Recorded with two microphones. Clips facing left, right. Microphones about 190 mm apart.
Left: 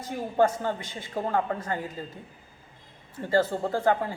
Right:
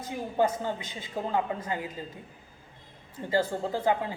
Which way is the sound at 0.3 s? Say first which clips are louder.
Left 3 dB; 15° right (ahead or behind).